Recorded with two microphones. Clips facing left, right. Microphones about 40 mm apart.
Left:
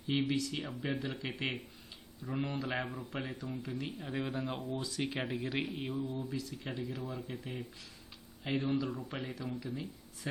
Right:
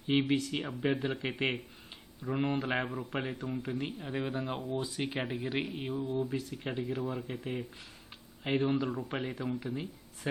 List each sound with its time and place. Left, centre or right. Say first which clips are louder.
0.1 s speech: right 4 dB; right
3.9 s speech: right 2 dB; centre
4.6 s speech: right 2 dB; right
6.0 s speech: right 4 dB; right
6.5 s speech: right 5 dB; right
8.4 s speech: right 4 dB; right